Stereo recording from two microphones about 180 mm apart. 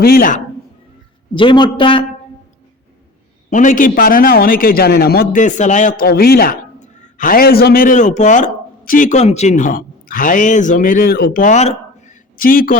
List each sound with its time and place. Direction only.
0.0 s a man's voice: 55° left (ahead or behind)
1.3 s a man's voice: 25° left (ahead or behind)
3.5 s a man's voice: 45° left (ahead or behind)